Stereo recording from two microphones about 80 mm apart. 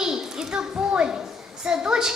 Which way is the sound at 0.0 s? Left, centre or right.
Centre.